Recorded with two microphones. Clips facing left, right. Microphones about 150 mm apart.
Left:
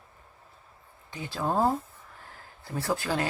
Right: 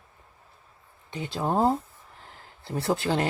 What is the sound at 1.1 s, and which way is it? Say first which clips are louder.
Speech: right 2 dB; 20° right (ahead or behind).